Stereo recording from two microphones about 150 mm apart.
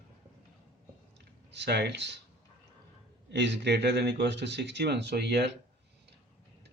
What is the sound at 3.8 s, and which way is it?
Speech, 90° right.